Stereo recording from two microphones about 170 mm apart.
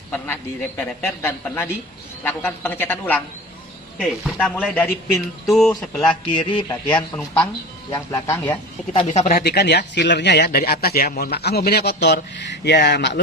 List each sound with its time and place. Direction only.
0.8 s speech: 10° left (ahead or behind)
6.3 s speech: 30° left (ahead or behind)
6.8 s speech: 10° left (ahead or behind)
7.9 s speech: 20° left (ahead or behind)
9.0 s speech: 40° left (ahead or behind)
9.3 s a man's voice: 70° left (ahead or behind); by 13.1 s 90° left